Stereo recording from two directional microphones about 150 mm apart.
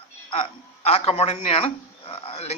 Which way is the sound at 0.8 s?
40° left (ahead or behind).